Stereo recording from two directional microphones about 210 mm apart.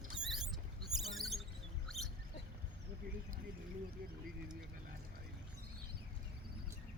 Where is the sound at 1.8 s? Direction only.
Centre (ahead or behind).